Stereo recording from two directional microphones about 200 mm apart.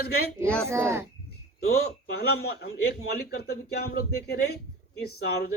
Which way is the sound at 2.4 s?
50° left (ahead or behind).